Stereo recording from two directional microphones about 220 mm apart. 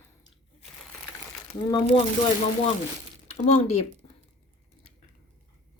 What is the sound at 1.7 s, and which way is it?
Speech, 25° left (ahead or behind).